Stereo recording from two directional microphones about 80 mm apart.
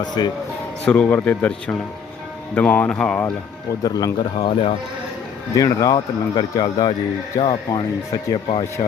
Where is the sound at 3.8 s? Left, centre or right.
Left.